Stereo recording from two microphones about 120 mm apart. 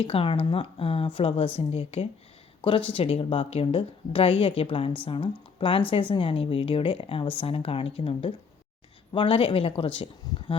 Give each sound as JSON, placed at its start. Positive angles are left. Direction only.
{"t": 0.0, "sound": "speech", "side_deg": 50}
{"t": 2.6, "sound": "speech", "side_deg": 45}
{"t": 10.5, "sound": "a sound", "side_deg": 50}